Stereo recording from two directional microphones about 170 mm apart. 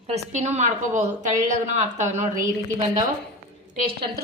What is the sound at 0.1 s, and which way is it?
A woman's voice, 40° right (ahead or behind).